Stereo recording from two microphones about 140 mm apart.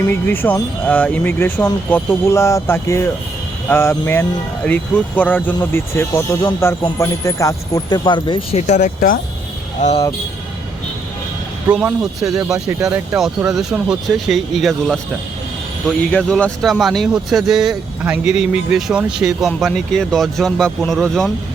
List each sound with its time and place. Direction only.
0.1 s speech: 15° left (ahead or behind); by 8.4 s 35° left (ahead or behind)
8.5 s speech: 60° left (ahead or behind); by 9.1 s 75° left (ahead or behind)
9.8 s speech: 60° left (ahead or behind)
11.7 s speech: 10° right (ahead or behind)
12.2 s speech: 25° right (ahead or behind)
12.8 s speech: 5° right (ahead or behind)